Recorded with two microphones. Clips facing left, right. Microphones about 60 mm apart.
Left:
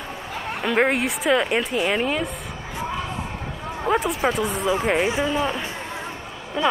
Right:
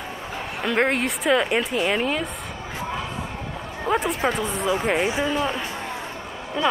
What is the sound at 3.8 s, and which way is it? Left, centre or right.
Speech, centre.